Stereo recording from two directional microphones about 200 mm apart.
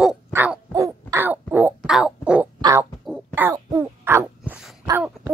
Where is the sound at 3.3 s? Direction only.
10° right (ahead or behind).